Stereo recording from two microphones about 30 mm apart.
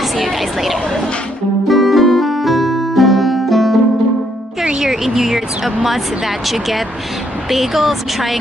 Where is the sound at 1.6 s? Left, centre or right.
Centre.